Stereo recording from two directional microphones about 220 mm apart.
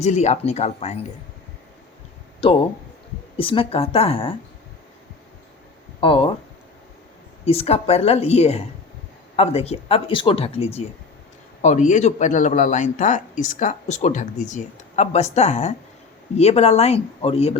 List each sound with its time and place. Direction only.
0.0 s speech: 30° left (ahead or behind)
2.4 s speech: 25° left (ahead or behind)
6.0 s speech: 25° left (ahead or behind)
7.4 s speech: 25° left (ahead or behind)